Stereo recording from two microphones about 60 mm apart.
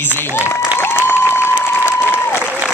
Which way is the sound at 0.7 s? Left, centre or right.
Left.